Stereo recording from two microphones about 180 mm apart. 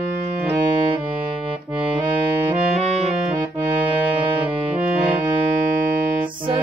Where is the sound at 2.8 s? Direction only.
35° right (ahead or behind).